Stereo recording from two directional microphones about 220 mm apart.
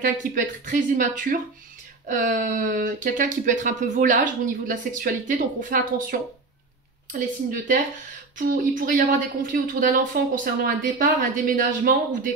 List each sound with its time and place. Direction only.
0.0 s speech: 35° right (ahead or behind)